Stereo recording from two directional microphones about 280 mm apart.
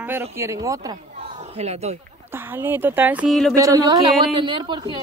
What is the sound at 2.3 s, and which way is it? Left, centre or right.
Speech, centre.